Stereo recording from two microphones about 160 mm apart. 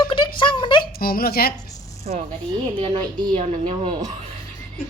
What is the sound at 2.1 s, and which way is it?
Speech, 60° right (ahead or behind).